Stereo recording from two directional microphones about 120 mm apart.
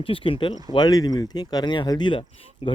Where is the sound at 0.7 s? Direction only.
35° left (ahead or behind).